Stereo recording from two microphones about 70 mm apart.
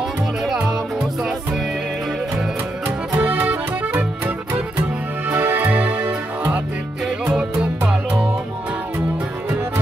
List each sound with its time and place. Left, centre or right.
3.2 s music: right
5.3 s music: right
7.9 s music: centre